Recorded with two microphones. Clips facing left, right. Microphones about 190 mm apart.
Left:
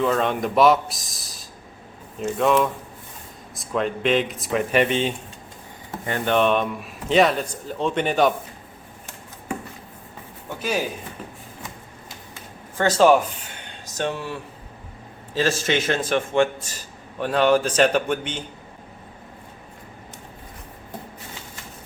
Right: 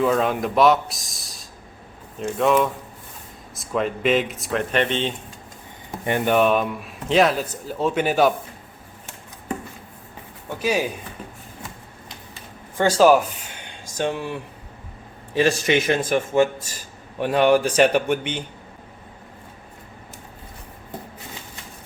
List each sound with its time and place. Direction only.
0.0 s a man's voice: 5° right (ahead or behind)
6.1 s a man's voice: 15° right (ahead or behind)
6.3 s a man's voice: 5° right (ahead or behind)
10.6 s a man's voice: 10° right (ahead or behind)
12.7 s a man's voice: 10° right (ahead or behind)
15.4 s a man's voice: 15° right (ahead or behind)